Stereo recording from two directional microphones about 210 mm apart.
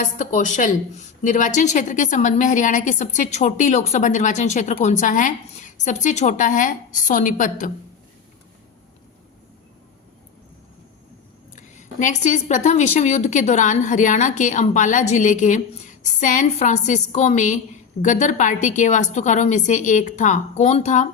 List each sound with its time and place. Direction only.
0.0 s a woman's voice: 35° left (ahead or behind)
11.5 s a woman's voice: 35° left (ahead or behind)